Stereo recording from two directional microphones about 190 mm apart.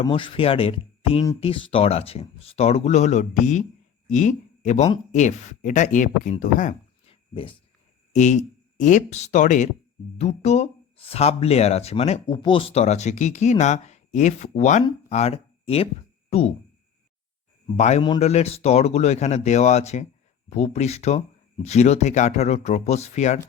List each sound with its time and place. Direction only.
0.0 s a man's voice: 25° left (ahead or behind)
17.7 s speech: 35° left (ahead or behind)